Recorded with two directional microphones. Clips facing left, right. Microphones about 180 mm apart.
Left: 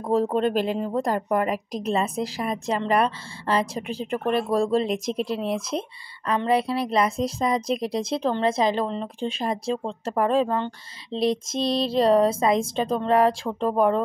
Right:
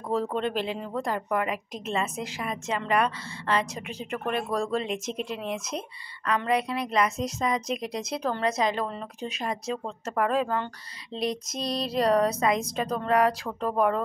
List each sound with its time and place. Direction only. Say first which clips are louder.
0.1 s a woman's voice: left 6 dB; 40° left (ahead or behind)